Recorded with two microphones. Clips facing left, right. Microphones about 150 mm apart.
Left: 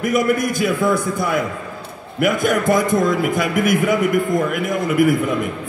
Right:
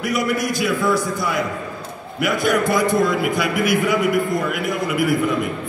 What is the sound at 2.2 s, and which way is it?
A man's voice, 45° left (ahead or behind).